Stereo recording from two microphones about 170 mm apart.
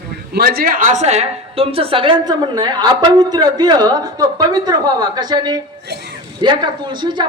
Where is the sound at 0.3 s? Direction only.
65° right (ahead or behind).